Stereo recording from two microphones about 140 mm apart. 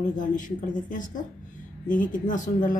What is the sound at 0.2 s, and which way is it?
A woman's voice, 65° left (ahead or behind).